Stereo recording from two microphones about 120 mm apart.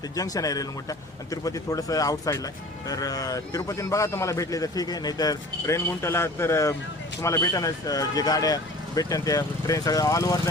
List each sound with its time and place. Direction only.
0.2 s a man's voice: 30° left (ahead or behind)